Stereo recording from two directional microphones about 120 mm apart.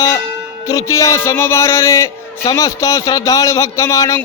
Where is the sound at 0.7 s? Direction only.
25° left (ahead or behind).